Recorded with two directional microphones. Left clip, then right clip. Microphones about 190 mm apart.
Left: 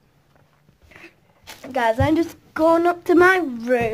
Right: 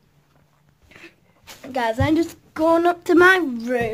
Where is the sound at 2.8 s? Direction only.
20° right (ahead or behind).